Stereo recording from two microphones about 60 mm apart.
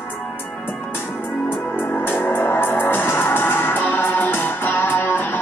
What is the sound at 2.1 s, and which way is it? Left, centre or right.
Music, left.